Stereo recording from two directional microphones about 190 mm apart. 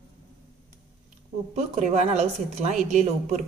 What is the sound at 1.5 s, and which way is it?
A woman's voice, 35° right (ahead or behind).